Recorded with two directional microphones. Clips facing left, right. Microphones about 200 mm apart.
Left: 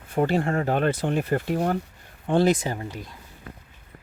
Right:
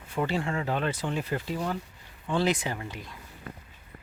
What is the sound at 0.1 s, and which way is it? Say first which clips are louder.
Speech: left 6 dB; 50° left (ahead or behind).